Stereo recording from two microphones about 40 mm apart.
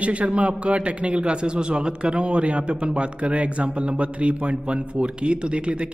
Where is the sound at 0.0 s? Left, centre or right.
Right.